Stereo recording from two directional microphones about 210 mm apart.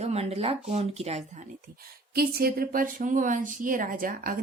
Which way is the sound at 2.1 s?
45° right (ahead or behind).